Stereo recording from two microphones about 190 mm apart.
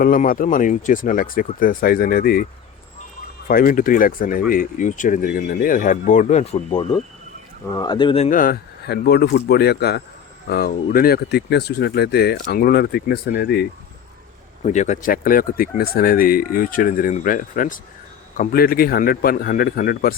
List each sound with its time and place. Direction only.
0.0 s speech: 45° left (ahead or behind)
14.6 s speech: 40° left (ahead or behind)